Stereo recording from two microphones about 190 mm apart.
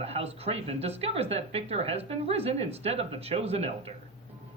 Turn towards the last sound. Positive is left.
turn(degrees=-30)  # may be behind; listen again after turning